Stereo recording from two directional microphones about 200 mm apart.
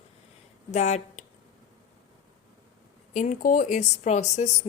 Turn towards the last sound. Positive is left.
turn(degrees=35)  # may be behind; listen again after turning